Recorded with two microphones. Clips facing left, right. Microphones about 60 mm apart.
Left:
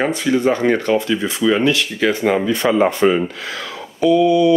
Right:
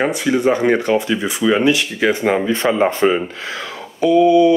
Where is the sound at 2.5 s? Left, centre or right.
Right.